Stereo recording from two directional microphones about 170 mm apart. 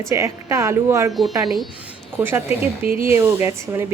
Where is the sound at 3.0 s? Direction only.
15° right (ahead or behind).